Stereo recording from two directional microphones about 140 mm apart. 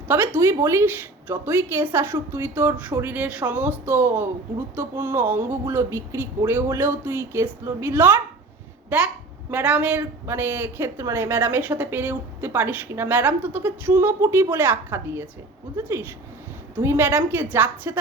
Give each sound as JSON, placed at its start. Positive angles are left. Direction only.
{"t": 0.1, "sound": "speech", "side_deg": -15}
{"t": 16.7, "sound": "speech", "side_deg": -15}